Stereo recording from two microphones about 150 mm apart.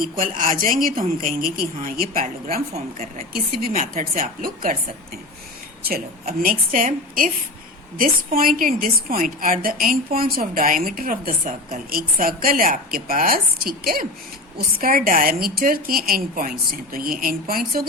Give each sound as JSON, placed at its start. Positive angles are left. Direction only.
{"t": 0.2, "sound": "a woman's voice", "side_deg": -60}
{"t": 3.3, "sound": "a woman's voice", "side_deg": -75}
{"t": 3.8, "sound": "a woman's voice", "side_deg": -50}